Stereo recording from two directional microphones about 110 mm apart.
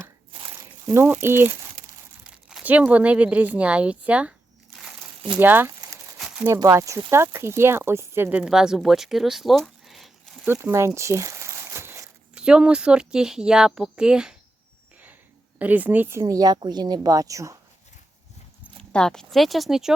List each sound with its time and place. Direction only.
0.9 s speech: 20° right (ahead or behind)
2.5 s speech: 10° right (ahead or behind)
5.4 s speech: 20° right (ahead or behind); by 10.1 s centre (ahead or behind)
10.4 s crumpling: 20° right (ahead or behind)
12.3 s speech: 10° right (ahead or behind)
15.5 s speech: 15° right (ahead or behind)
16.3 s a woman's voice: 35° right (ahead or behind)
18.8 s speech: 5° left (ahead or behind)